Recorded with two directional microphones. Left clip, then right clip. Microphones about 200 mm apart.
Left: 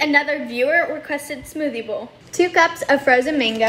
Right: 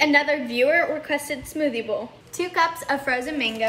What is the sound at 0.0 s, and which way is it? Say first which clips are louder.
A woman's voice: left 1 dB; centre (ahead or behind).